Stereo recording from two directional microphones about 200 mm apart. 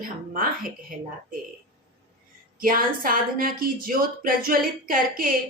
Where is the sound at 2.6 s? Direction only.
45° right (ahead or behind).